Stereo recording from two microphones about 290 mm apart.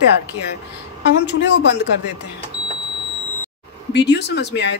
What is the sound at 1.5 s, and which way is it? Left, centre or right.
Speech, left.